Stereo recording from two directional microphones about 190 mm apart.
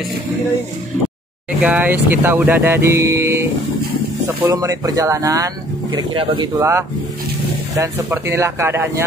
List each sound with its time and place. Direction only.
1.6 s speech: 5° right (ahead or behind)
4.5 s speech: 20° right (ahead or behind)